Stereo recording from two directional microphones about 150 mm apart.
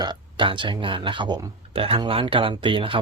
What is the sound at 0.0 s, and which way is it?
Speech, 30° right (ahead or behind).